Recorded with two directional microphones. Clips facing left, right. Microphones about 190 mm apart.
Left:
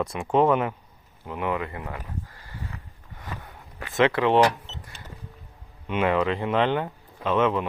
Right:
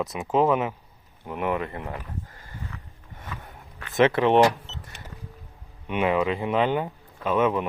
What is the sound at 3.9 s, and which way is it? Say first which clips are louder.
Speech: right 1 dB; 20° right (ahead or behind).